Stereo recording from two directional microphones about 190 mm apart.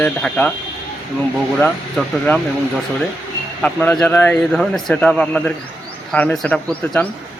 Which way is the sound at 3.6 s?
5° left (ahead or behind).